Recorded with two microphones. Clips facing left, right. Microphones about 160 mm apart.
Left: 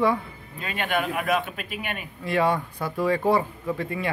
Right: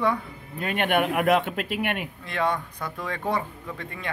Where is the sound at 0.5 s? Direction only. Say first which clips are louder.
Right 4 dB; 60° right (ahead or behind).